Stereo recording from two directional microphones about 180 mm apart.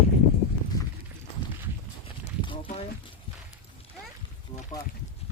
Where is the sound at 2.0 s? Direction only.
30° left (ahead or behind).